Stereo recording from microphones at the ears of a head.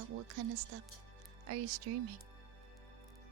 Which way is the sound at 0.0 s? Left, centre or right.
Right.